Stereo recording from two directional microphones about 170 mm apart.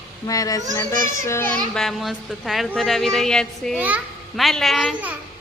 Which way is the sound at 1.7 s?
Centre (ahead or behind).